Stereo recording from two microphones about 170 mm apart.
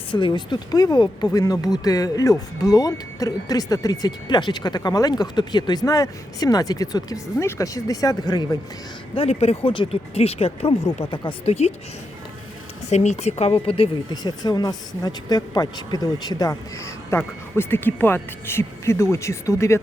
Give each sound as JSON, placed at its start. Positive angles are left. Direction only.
{"t": 0.1, "sound": "speech", "side_deg": 25}
{"t": 9.1, "sound": "speech", "side_deg": 35}
{"t": 12.9, "sound": "speech", "side_deg": 40}